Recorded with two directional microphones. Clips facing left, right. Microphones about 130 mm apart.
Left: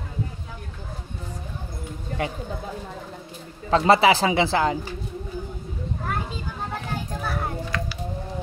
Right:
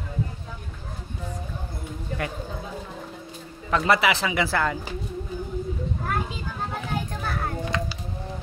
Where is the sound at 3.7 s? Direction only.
30° left (ahead or behind).